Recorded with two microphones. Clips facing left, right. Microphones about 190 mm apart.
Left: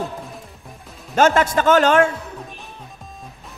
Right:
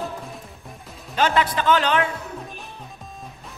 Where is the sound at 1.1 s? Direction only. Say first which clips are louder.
Left 5 dB; 45° left (ahead or behind).